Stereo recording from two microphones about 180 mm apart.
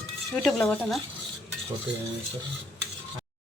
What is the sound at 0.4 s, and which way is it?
Speech, centre (ahead or behind).